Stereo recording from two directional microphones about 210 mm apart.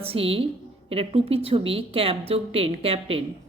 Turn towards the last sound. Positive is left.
turn(degrees=-25)  # may be behind; listen again after turning